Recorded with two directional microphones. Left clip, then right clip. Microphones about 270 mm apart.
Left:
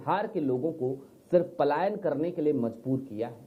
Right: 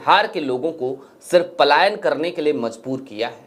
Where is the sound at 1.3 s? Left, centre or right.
Centre.